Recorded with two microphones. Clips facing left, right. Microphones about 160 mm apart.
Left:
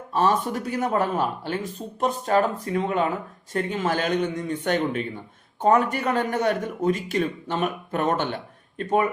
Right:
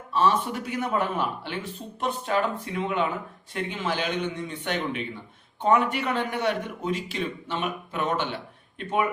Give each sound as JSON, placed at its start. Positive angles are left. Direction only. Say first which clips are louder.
{"t": 0.1, "sound": "a man's voice", "louder": "left 1 dB", "side_deg": 45}